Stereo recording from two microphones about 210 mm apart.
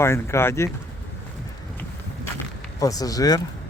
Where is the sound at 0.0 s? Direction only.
10° left (ahead or behind).